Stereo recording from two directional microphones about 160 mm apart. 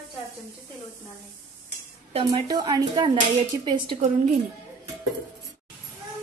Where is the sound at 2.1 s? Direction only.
40° right (ahead or behind).